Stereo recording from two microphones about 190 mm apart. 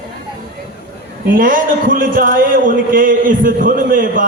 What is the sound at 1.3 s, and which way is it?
A man's voice, 45° right (ahead or behind).